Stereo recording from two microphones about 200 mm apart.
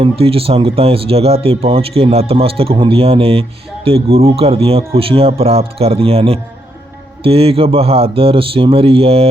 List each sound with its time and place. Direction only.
0.0 s speech: 30° right (ahead or behind)